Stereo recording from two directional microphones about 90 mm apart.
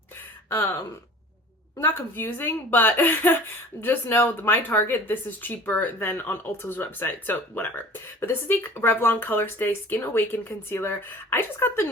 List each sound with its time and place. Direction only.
1.8 s speech: 20° left (ahead or behind)